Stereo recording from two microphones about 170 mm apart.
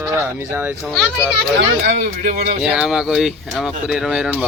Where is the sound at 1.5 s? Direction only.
75° right (ahead or behind).